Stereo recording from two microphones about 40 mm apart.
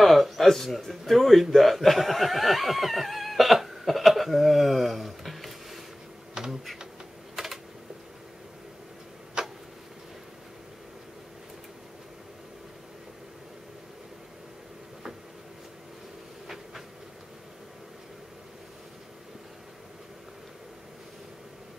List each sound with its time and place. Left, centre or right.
0.0 s a sound: centre
6.3 s computer keyboard: centre
7.4 s typing: centre
9.4 s tick-tock: right